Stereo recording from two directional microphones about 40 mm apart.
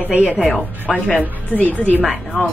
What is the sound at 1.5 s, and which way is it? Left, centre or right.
Speech, left.